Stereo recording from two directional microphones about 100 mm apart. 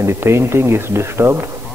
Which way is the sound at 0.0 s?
25° right (ahead or behind).